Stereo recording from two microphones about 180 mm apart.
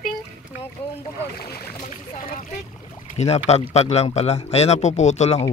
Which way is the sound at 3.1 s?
35° left (ahead or behind).